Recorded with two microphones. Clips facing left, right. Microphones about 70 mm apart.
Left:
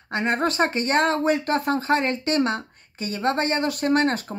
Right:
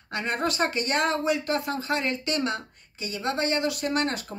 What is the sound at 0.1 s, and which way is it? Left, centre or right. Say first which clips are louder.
Speech: left 5 dB; left.